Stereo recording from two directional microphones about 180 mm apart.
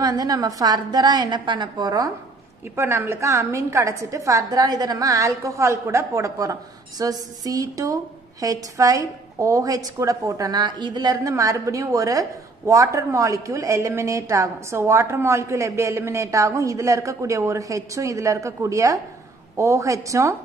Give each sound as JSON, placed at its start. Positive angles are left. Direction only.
{"t": 0.0, "sound": "a woman's voice", "side_deg": -20}